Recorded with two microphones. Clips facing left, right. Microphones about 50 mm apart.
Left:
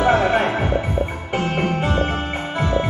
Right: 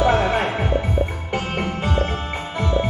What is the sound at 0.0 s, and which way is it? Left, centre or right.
Music, centre.